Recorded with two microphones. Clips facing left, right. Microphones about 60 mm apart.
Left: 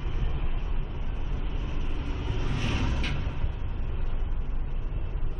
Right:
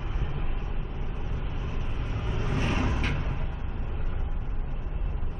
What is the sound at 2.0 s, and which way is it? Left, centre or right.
Vehicle, centre.